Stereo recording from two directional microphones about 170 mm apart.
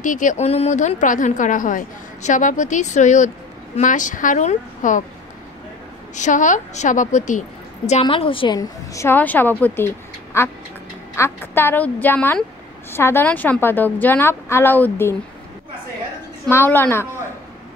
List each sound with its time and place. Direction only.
0.0 s a woman's voice: 50° left (ahead or behind)
6.1 s a woman's voice: 45° left (ahead or behind); by 15.1 s 15° left (ahead or behind)
16.4 s a woman's voice: 15° left (ahead or behind)